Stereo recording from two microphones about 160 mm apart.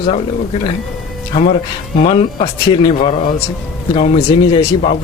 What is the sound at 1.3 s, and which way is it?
Speech, 40° left (ahead or behind).